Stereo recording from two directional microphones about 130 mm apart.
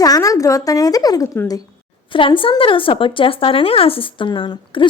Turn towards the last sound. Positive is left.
turn(degrees=40)  # may be behind; listen again after turning